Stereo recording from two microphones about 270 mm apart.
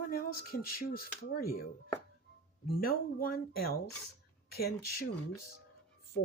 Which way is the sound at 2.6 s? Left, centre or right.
Left.